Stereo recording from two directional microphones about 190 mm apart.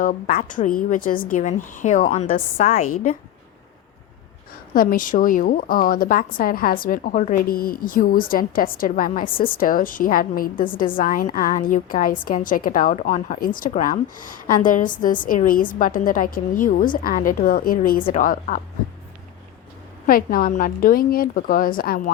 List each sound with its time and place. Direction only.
0.0 s a woman's voice: 45° left (ahead or behind)
4.7 s a woman's voice: 50° left (ahead or behind)
20.1 s a woman's voice: 50° left (ahead or behind)